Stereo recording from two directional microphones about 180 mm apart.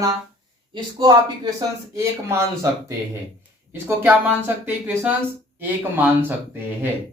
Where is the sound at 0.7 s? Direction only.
25° right (ahead or behind).